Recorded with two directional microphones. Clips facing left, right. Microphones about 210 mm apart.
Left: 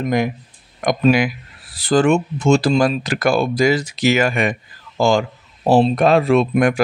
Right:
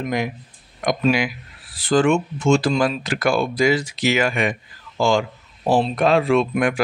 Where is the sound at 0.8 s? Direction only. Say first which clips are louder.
Left 4 dB; 50° left (ahead or behind).